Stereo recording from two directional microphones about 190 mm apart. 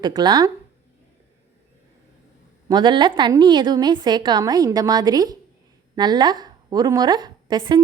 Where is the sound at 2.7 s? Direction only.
25° right (ahead or behind).